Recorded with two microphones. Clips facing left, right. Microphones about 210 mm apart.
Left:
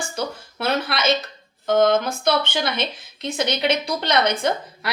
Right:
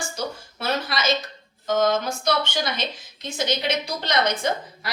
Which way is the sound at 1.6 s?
55° left (ahead or behind).